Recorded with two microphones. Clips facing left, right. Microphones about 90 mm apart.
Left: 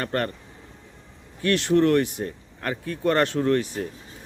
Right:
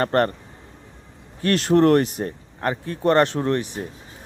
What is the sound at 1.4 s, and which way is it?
Speech, 40° right (ahead or behind).